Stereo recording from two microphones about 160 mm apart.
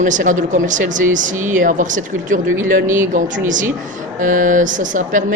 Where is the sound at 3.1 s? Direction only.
55° right (ahead or behind).